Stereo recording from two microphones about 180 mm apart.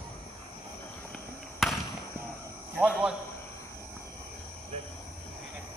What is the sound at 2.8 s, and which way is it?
Speech, 5° right (ahead or behind).